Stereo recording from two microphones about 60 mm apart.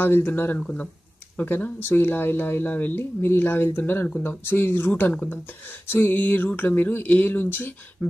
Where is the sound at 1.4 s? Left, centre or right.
Left.